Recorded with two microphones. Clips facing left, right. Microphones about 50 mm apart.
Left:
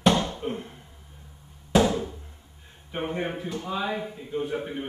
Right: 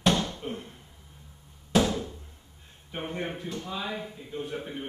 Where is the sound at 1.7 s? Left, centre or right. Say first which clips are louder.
Left 3 dB; centre.